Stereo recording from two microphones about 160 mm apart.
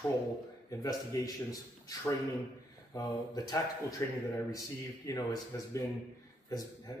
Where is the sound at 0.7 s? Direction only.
20° left (ahead or behind).